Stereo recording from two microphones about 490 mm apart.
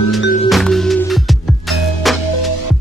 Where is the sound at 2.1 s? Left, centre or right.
Left.